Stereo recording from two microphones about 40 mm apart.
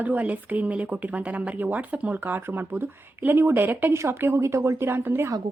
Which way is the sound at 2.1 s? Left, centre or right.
Right.